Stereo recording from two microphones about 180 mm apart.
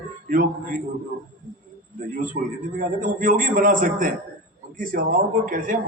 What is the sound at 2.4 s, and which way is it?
Speech, 60° right (ahead or behind).